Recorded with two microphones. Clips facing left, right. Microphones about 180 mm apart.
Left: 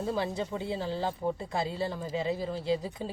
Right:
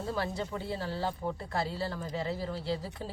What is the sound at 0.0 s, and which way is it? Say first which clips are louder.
Speech: left 3 dB; 20° left (ahead or behind).